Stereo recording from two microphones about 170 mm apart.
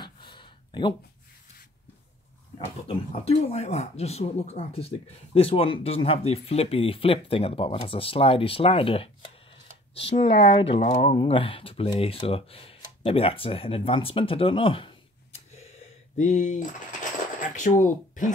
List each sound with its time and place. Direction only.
0.0 s a sound: 30° left (ahead or behind)
3.1 s speech: 35° left (ahead or behind)
16.2 s speech: 45° left (ahead or behind)